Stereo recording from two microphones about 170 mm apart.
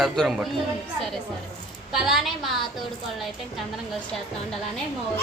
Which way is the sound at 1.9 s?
Centre (ahead or behind).